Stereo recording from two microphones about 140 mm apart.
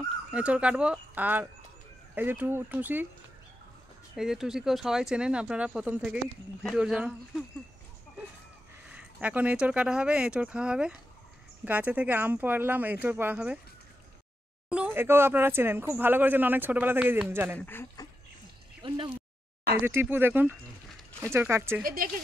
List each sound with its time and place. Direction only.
0.3 s speech: 10° right (ahead or behind)
4.2 s speech: 5° right (ahead or behind)
8.8 s speech: 10° right (ahead or behind)
15.0 s speech: 15° right (ahead or behind)
17.6 s speech: 15° left (ahead or behind)
18.8 s speech: 35° right (ahead or behind)
19.8 s speech: 15° right (ahead or behind)
21.8 s speech: 90° right